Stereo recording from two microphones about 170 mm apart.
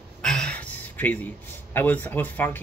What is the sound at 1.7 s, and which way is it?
Speech, 10° left (ahead or behind).